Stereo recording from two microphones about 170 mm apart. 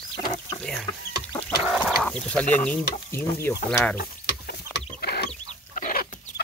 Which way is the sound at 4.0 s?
65° left (ahead or behind).